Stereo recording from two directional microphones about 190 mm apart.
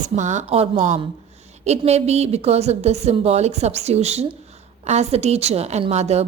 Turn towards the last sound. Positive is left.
turn(degrees=-35)  # may be behind; listen again after turning